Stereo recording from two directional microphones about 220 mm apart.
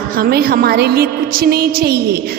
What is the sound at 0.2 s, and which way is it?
A woman's voice, 45° right (ahead or behind).